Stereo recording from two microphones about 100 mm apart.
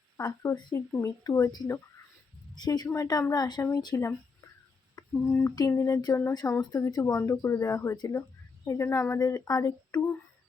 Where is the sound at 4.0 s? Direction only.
30° left (ahead or behind).